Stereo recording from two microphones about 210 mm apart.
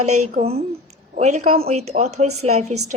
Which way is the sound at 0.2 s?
30° right (ahead or behind).